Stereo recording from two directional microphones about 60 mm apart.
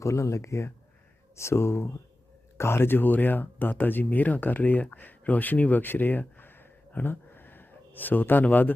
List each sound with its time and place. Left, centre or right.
0.0 s speech: left